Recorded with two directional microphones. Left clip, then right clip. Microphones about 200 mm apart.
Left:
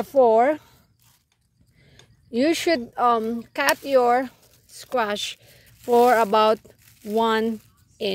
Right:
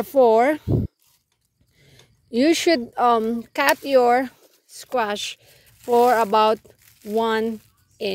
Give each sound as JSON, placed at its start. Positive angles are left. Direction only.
{"t": 0.0, "sound": "speech", "side_deg": -25}
{"t": 2.3, "sound": "speech", "side_deg": -30}
{"t": 4.9, "sound": "speech", "side_deg": -10}